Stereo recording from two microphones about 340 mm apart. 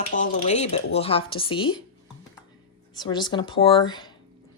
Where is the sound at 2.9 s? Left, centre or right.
Centre.